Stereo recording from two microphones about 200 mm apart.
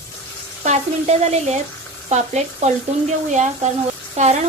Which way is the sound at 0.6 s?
35° right (ahead or behind).